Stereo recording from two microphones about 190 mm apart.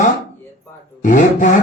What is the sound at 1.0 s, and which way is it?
Speech, 45° left (ahead or behind).